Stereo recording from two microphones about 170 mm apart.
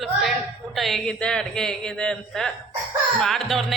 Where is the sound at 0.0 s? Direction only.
Centre (ahead or behind).